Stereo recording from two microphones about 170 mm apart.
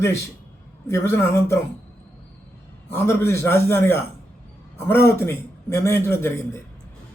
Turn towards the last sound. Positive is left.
turn(degrees=15)  # may be behind; listen again after turning